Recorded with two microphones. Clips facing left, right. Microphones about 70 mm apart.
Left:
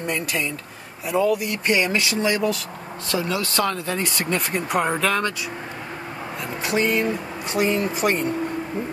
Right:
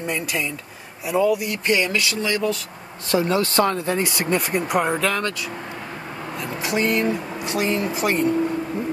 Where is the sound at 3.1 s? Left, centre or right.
Right.